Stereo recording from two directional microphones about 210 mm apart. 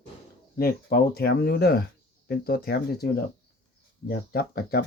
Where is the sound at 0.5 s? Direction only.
45° left (ahead or behind).